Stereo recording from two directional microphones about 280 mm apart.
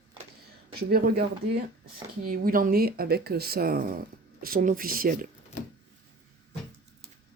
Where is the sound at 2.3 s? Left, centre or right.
Right.